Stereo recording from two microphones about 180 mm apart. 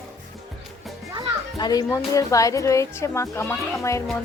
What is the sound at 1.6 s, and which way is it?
Speech, 20° left (ahead or behind).